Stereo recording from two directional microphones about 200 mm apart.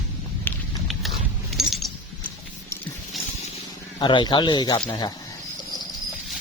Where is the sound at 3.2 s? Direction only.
Centre (ahead or behind).